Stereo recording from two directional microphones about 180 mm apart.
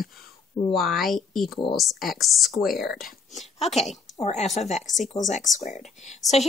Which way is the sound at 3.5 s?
35° left (ahead or behind).